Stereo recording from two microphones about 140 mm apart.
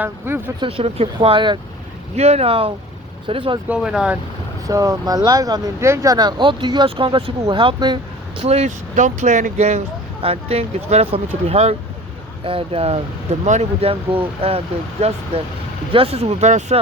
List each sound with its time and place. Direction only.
0.0 s speech: 15° right (ahead or behind)
0.6 s speech: 40° right (ahead or behind)
2.1 s speech: 50° right (ahead or behind)
3.7 s speech: 5° right (ahead or behind)
4.6 s speech: 25° right (ahead or behind)
8.4 s speech: 50° right (ahead or behind)